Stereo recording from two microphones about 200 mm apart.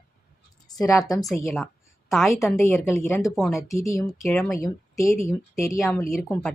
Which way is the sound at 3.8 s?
15° left (ahead or behind).